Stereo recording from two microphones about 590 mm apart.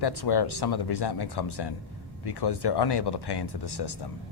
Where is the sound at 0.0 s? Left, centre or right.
Left.